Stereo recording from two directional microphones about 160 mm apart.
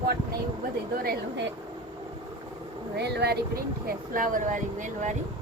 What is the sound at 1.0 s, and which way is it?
Speech, 80° right.